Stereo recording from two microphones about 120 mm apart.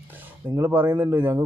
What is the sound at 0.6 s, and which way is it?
Speech, 15° right (ahead or behind).